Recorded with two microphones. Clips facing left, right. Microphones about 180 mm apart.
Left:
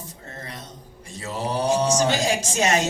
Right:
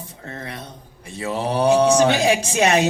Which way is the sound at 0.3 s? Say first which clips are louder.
Right 6 dB; 65° right (ahead or behind).